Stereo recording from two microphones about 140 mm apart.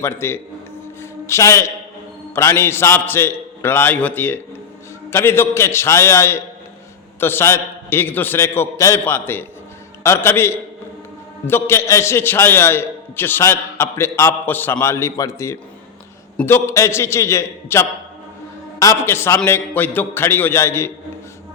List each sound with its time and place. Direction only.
0.0 s a man's voice: 20° left (ahead or behind)